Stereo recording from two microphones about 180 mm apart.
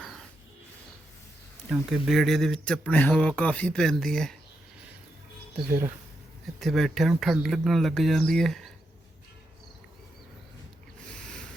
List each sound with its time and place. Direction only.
1.7 s speech: centre (ahead or behind)
6.6 s speech: centre (ahead or behind)